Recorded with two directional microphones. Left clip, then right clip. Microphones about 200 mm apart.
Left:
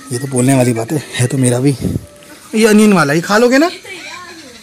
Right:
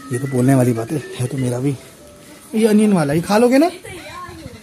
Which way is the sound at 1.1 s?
15° left (ahead or behind).